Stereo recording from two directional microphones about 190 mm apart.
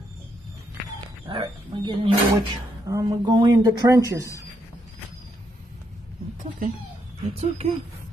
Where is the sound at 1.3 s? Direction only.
25° right (ahead or behind).